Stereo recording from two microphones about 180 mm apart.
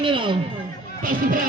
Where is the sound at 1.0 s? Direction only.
50° right (ahead or behind).